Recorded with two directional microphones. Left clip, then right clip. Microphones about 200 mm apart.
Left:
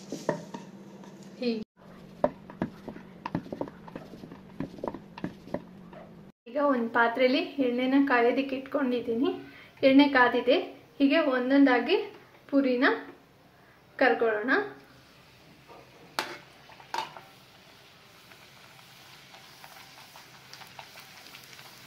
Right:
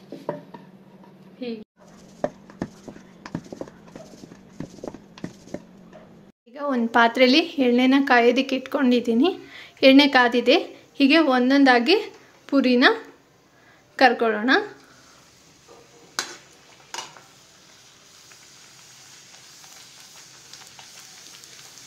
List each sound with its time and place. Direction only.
1.4 s speech: centre (ahead or behind)
6.5 s a woman's voice: 60° right (ahead or behind)
13.9 s a woman's voice: 65° right (ahead or behind)